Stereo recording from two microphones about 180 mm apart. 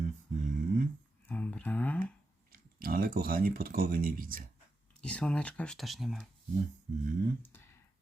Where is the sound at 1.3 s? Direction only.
10° left (ahead or behind).